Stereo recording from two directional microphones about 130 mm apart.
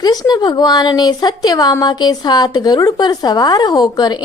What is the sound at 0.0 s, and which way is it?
Speech, 30° left (ahead or behind).